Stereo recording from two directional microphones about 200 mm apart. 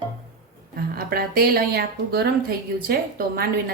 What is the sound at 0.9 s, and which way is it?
A woman's voice, 50° right (ahead or behind).